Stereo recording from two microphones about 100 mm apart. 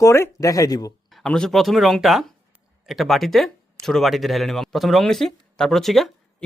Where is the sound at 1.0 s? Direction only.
Centre (ahead or behind).